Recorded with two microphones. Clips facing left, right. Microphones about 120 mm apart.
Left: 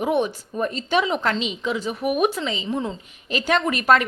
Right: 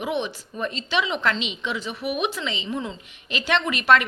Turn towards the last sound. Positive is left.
turn(degrees=40)  # may be behind; listen again after turning